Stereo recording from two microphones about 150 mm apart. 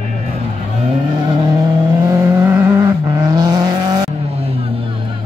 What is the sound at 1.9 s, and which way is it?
Vehicle, 20° right (ahead or behind).